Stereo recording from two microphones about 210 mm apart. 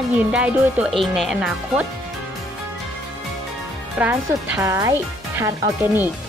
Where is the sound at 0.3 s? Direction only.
5° right (ahead or behind).